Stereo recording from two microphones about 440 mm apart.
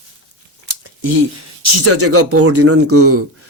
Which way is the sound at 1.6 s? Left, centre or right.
Right.